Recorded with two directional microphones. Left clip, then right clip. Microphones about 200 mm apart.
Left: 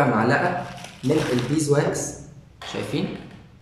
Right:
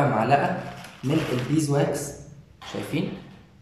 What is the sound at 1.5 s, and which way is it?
Speech, 5° right (ahead or behind).